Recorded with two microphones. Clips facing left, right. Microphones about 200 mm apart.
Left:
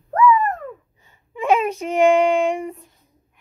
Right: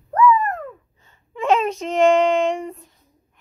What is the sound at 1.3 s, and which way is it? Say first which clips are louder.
Child singing: even; 10° left (ahead or behind).